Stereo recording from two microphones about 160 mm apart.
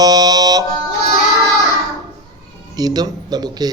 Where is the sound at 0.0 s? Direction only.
25° right (ahead or behind).